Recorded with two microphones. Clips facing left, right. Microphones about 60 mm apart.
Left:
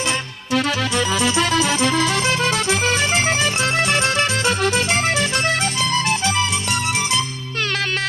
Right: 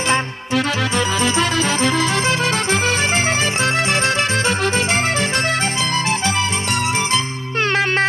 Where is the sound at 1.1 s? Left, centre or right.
Right.